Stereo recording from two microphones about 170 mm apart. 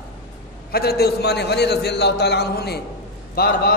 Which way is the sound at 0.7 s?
70° left (ahead or behind).